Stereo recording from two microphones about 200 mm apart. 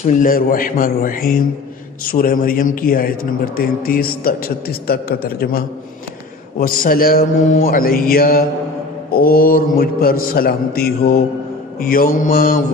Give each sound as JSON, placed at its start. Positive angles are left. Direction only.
{"t": 0.0, "sound": "a man's voice", "side_deg": 40}